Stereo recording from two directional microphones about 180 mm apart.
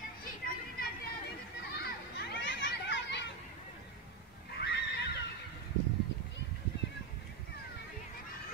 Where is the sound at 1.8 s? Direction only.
80° left.